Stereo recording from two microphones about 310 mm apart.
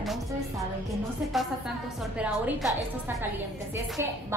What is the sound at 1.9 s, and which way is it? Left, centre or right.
Speech, centre.